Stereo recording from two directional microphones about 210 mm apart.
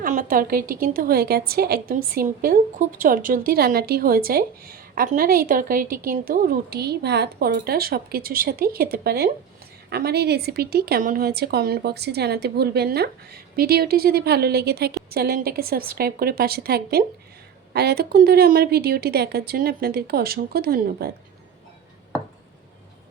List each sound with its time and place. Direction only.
0.0 s a woman's voice: 40° right (ahead or behind)